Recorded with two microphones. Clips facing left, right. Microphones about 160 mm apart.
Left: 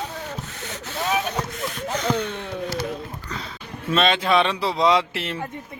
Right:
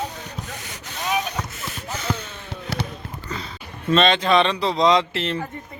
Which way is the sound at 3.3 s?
Centre (ahead or behind).